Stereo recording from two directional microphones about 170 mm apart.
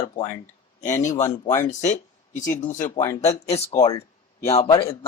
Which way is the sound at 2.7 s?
20° left (ahead or behind).